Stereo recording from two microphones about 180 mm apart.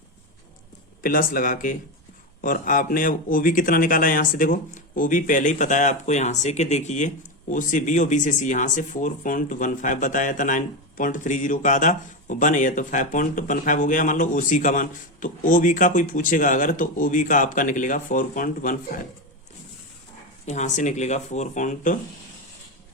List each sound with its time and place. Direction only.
1.0 s speech: 50° left (ahead or behind)
20.4 s speech: 40° left (ahead or behind)